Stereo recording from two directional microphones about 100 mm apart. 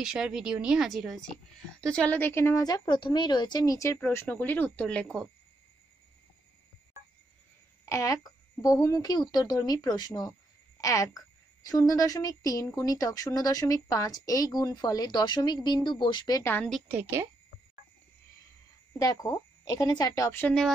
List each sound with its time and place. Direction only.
0.0 s a woman's voice: 5° right (ahead or behind)
7.8 s a woman's voice: 30° left (ahead or behind); by 16.3 s 50° left (ahead or behind)
17.0 s a woman's voice: 25° right (ahead or behind)
18.9 s a woman's voice: 40° left (ahead or behind)